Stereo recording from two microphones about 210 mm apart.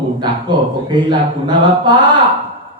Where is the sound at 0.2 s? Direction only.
20° right (ahead or behind).